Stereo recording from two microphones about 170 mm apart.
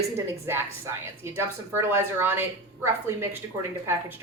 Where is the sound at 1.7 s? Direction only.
15° right (ahead or behind).